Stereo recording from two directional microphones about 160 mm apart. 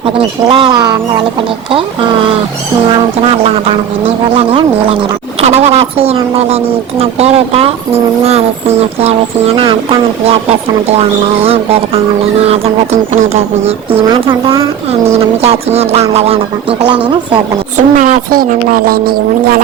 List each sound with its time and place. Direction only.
0.0 s speech: 30° right (ahead or behind)
4.4 s speech: 30° right (ahead or behind)
11.4 s speech: 35° right (ahead or behind)
17.7 s speech: 55° right (ahead or behind)